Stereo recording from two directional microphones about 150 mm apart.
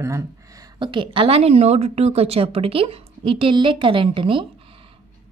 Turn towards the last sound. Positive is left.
turn(degrees=-35)  # may be behind; listen again after turning